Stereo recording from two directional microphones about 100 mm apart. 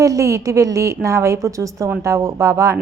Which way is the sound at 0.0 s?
35° right (ahead or behind).